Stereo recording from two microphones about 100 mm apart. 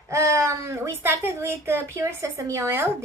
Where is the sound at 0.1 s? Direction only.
30° right (ahead or behind).